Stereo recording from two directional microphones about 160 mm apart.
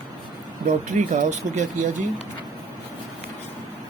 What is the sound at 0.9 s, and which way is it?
Speech, 50° right (ahead or behind).